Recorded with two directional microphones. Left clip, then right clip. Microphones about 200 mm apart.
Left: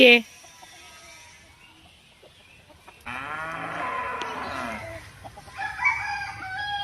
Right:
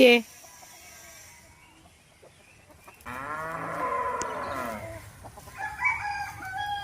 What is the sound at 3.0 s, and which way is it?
Sheep, 50° right (ahead or behind).